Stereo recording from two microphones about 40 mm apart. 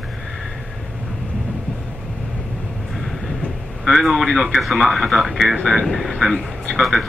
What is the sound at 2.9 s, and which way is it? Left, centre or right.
Vehicle, centre.